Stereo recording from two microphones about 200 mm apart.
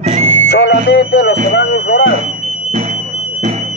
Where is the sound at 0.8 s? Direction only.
55° left (ahead or behind).